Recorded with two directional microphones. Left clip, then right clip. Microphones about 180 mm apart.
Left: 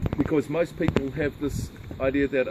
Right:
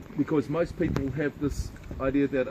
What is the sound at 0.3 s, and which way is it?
Speech, 40° right (ahead or behind).